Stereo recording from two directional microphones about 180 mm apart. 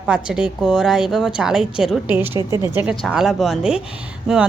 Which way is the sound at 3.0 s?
Centre (ahead or behind).